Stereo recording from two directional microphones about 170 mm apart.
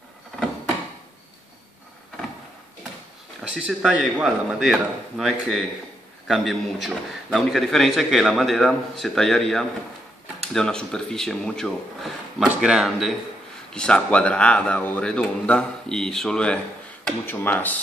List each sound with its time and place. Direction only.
3.4 s a man's voice: 5° right (ahead or behind); by 17.7 s 10° left (ahead or behind)